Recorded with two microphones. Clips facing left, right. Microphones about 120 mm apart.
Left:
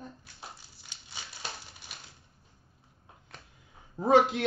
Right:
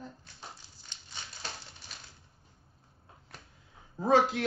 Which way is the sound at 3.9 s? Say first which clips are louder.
Left 2 dB; 20° left (ahead or behind).